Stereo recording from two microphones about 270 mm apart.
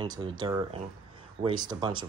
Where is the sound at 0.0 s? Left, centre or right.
Centre.